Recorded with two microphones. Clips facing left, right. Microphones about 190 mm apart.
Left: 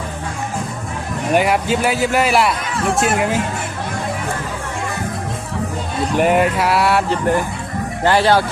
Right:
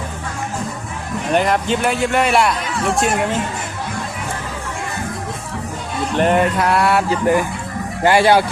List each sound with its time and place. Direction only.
1.3 s speech: 5° left (ahead or behind)
6.1 s speech: 5° left (ahead or behind); by 8.4 s 15° right (ahead or behind)